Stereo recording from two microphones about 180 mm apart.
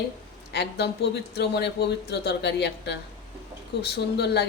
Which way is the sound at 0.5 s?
65° left (ahead or behind).